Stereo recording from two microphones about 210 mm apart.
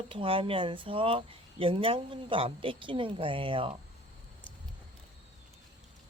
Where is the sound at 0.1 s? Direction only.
25° right (ahead or behind).